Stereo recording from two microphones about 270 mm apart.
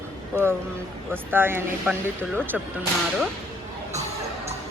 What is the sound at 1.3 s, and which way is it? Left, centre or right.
Speech, centre.